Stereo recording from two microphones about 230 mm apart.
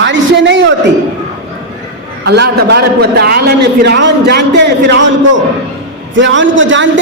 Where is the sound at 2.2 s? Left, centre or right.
Right.